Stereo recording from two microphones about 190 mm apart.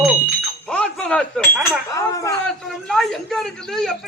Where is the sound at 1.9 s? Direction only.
15° left (ahead or behind).